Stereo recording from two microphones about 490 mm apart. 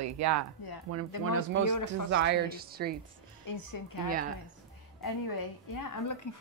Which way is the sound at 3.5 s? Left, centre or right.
Left.